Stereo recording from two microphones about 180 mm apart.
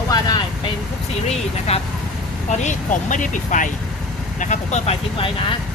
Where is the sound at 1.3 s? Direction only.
35° left (ahead or behind).